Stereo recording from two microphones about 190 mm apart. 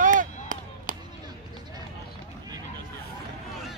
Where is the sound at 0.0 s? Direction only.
45° right (ahead or behind).